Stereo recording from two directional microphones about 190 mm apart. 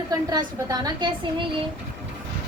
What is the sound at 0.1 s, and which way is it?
A woman's voice, 20° right (ahead or behind).